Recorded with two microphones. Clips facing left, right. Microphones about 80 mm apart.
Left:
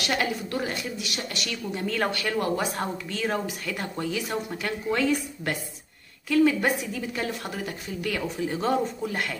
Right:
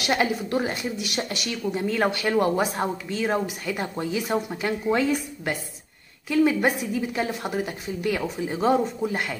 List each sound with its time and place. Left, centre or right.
0.0 s a woman's voice: centre
1.4 s speech: centre
6.2 s speech: centre